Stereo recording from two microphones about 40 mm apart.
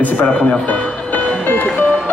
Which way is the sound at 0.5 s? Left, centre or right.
Left.